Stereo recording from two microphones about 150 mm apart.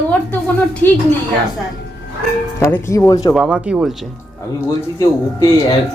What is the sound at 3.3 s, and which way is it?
Speech, 5° right (ahead or behind).